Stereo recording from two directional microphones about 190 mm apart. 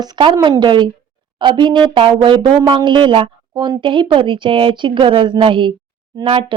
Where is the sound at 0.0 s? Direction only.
25° right (ahead or behind).